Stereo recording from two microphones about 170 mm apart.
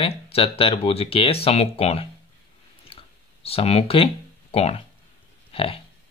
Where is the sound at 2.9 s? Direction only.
35° left (ahead or behind).